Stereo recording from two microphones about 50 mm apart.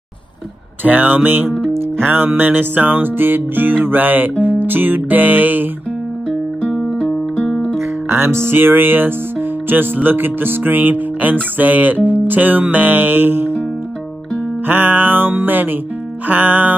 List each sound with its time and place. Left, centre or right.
0.8 s music: right
7.1 s music: centre
7.8 s music: right
8.5 s speech: right
10.0 s music: right
14.7 s music: right